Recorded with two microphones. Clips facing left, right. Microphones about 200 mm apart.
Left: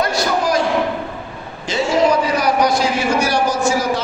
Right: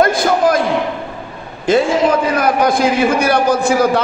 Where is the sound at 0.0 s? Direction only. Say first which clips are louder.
Right 6 dB; 50° right (ahead or behind).